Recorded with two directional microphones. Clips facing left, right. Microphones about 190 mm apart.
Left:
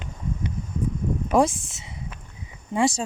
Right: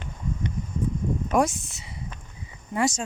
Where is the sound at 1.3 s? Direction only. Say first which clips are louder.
Left 3 dB; 30° left (ahead or behind).